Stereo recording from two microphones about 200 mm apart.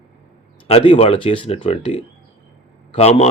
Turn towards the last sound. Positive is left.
turn(degrees=30)  # may be behind; listen again after turning